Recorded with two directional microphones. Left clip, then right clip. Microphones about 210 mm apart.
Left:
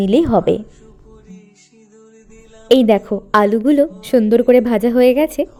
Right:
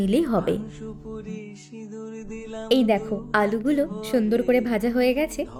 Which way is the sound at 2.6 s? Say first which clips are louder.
Left 9 dB; 30° left (ahead or behind).